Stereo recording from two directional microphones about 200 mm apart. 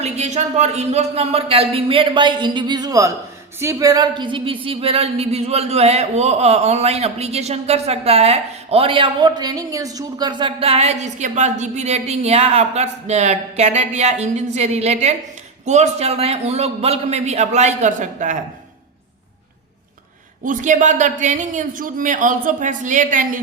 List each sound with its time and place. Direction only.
0.0 s a woman's voice: 35° right (ahead or behind)
20.4 s a woman's voice: 40° right (ahead or behind)